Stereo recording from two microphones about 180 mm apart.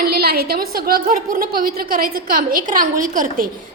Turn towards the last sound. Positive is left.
turn(degrees=-50)  # may be behind; listen again after turning